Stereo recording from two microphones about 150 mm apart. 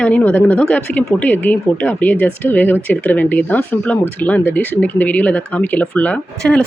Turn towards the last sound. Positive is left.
turn(degrees=10)  # may be behind; listen again after turning